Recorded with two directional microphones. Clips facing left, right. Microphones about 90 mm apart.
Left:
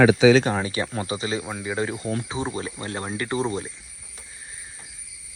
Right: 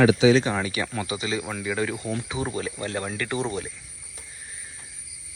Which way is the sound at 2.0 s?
35° left (ahead or behind).